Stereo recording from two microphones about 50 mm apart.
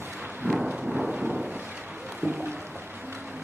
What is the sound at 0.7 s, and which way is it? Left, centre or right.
Thunder, centre.